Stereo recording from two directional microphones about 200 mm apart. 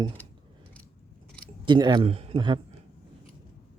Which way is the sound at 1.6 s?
20° right (ahead or behind).